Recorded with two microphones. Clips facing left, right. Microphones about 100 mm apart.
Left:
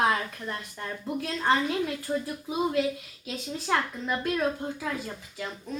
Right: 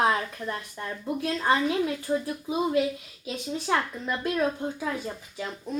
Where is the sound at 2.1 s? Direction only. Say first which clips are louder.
Right 2 dB; centre (ahead or behind).